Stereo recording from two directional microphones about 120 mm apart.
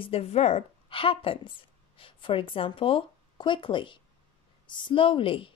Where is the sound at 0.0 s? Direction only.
55° left (ahead or behind).